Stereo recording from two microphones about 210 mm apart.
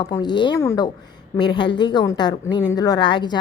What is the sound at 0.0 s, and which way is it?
A woman's voice, 20° left (ahead or behind).